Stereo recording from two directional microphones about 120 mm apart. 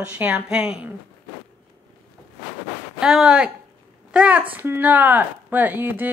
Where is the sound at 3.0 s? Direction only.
5° right (ahead or behind).